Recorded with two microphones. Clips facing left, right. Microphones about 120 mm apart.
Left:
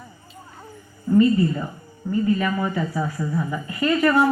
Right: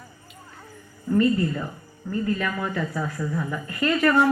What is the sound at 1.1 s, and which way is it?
A woman's voice, 10° left (ahead or behind).